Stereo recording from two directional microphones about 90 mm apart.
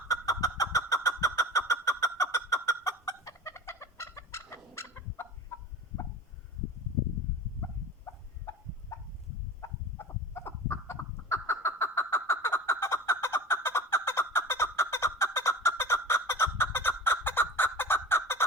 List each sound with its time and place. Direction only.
0.1 s chicken: 40° left (ahead or behind)
8.9 s fowl: 35° left (ahead or behind)
10.0 s a sound: 25° left (ahead or behind)